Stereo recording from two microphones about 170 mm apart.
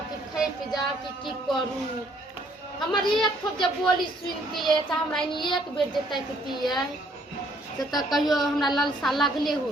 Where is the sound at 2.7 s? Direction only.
Centre (ahead or behind).